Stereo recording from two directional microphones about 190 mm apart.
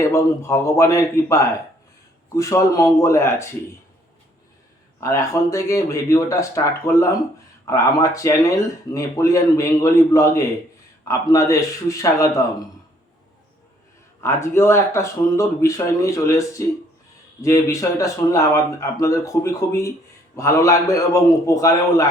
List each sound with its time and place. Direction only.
0.0 s speech: 15° left (ahead or behind)
4.9 s speech: 15° left (ahead or behind)
14.2 s speech: 15° left (ahead or behind)